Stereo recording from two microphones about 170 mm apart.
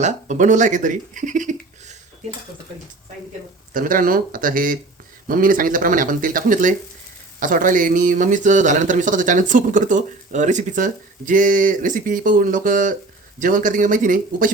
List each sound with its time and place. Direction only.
0.0 s speech: 45° right (ahead or behind)
3.8 s speech: 55° right (ahead or behind)